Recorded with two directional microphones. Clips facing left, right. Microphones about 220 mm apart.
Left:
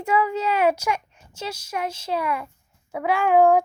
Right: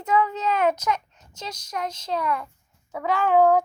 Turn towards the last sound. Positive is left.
turn(degrees=10)  # may be behind; listen again after turning